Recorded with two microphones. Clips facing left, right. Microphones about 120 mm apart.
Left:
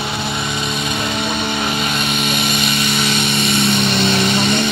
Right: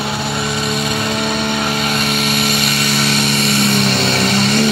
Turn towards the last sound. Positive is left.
turn(degrees=0)  # may be behind; listen again after turning